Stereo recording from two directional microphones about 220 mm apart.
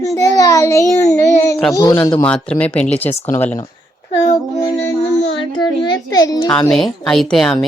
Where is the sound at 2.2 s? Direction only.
5° left (ahead or behind).